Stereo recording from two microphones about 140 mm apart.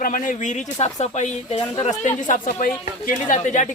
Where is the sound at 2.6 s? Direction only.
90° left.